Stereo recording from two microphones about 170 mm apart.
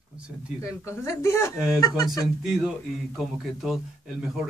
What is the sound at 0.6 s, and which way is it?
Speech, 15° left (ahead or behind).